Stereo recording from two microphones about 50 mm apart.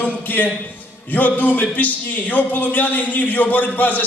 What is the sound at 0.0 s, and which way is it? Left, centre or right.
A man's voice, left.